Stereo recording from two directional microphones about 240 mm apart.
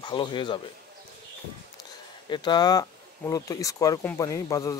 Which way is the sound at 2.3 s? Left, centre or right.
Centre.